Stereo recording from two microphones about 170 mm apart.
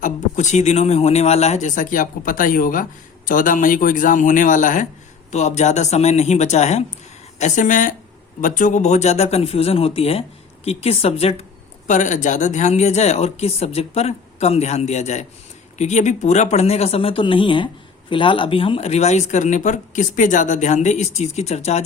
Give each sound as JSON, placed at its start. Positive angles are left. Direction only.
{"t": 0.0, "sound": "speech", "side_deg": 45}